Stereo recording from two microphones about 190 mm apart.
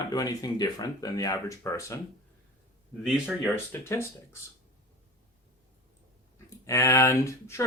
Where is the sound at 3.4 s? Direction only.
15° left (ahead or behind).